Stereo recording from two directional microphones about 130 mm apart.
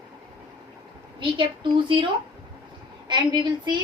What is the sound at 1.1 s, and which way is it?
Speech, 40° right (ahead or behind).